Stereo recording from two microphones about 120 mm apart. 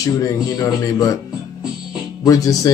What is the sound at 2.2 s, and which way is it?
Speech, 30° left (ahead or behind).